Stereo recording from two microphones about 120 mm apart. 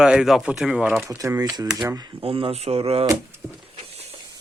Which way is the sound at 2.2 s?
50° right (ahead or behind).